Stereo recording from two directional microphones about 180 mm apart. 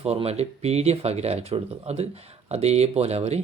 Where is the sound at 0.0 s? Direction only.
35° right (ahead or behind).